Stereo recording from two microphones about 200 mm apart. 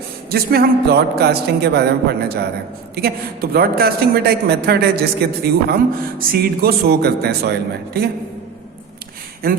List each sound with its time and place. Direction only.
0.3 s a man's voice: 50° right (ahead or behind)
9.4 s a man's voice: 50° right (ahead or behind)